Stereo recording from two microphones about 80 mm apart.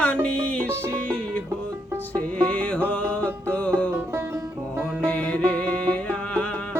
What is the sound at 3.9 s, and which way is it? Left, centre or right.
Music, right.